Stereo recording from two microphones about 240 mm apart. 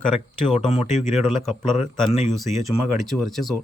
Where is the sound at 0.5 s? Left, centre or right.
Left.